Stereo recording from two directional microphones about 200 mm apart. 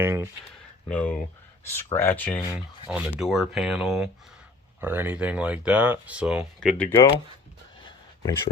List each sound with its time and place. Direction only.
0.0 s speech: 10° right (ahead or behind)
0.9 s speech: 5° left (ahead or behind)
2.9 s speech: 5° right (ahead or behind)
7.8 s a sound: 25° left (ahead or behind)